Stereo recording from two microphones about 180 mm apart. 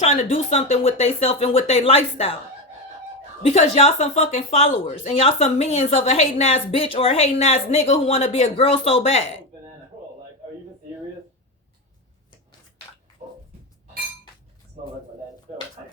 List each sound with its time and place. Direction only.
0.0 s a woman's voice: 35° left (ahead or behind)
3.4 s a woman's voice: 35° left (ahead or behind)